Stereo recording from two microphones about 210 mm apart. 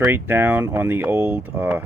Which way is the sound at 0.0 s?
10° right (ahead or behind).